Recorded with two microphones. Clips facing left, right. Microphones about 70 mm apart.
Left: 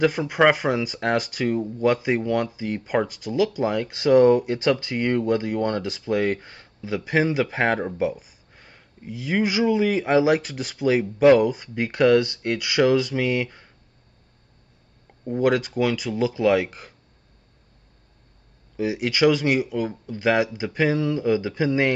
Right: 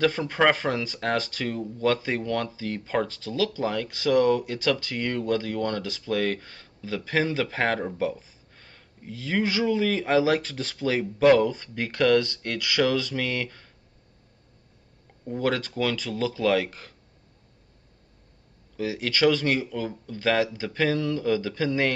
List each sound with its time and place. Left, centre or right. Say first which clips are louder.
0.0 s speech: left 3 dB; centre
15.4 s speech: left 5 dB; centre
18.8 s speech: left 3 dB; centre